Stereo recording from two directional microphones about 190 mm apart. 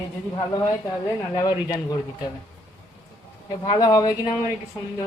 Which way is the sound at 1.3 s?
20° left (ahead or behind).